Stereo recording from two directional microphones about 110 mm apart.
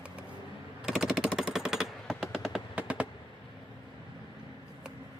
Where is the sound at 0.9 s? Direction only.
5° right (ahead or behind).